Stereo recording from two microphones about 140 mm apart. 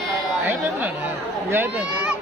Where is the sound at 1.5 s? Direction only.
15° right (ahead or behind).